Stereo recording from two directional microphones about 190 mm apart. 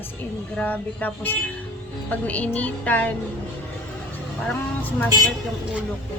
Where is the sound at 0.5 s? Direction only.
10° left (ahead or behind).